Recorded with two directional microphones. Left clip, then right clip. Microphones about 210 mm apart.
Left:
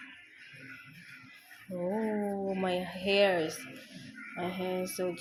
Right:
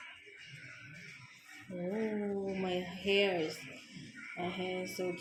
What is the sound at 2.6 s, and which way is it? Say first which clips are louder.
Speech: left 4 dB; 15° left (ahead or behind).